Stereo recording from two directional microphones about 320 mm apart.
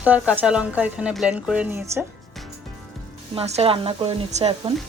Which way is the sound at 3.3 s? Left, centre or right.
Centre.